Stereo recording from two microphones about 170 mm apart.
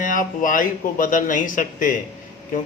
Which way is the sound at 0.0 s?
50° left (ahead or behind).